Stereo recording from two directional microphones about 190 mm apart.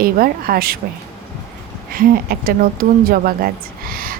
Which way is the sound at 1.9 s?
50° right (ahead or behind).